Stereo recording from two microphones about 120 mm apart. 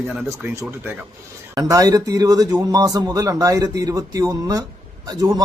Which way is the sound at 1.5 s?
30° right (ahead or behind).